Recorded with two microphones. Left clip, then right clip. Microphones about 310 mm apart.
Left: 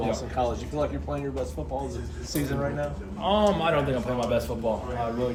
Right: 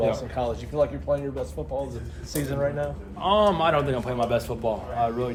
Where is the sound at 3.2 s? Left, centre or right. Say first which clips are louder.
Right 3 dB; centre.